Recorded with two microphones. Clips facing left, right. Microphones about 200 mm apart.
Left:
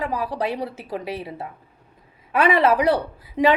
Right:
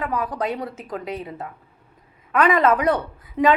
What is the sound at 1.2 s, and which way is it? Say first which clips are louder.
Speech: even; 10° left (ahead or behind).